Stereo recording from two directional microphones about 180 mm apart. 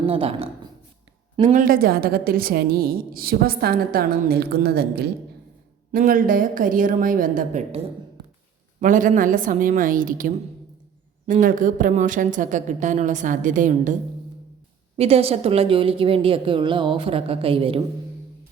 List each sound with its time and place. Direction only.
0.0 s a woman's voice: 30° right (ahead or behind)
1.4 s a woman's voice: 45° right (ahead or behind); by 5.0 s 60° right (ahead or behind)
5.9 s a woman's voice: 50° right (ahead or behind)
8.8 s a woman's voice: 45° right (ahead or behind)
14.9 s a woman's voice: 35° right (ahead or behind)